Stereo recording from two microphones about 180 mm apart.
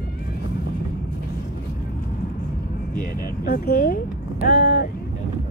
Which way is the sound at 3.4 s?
60° left (ahead or behind).